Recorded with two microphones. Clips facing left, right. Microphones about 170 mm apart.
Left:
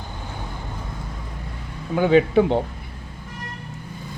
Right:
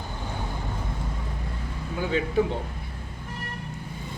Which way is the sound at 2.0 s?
70° left (ahead or behind).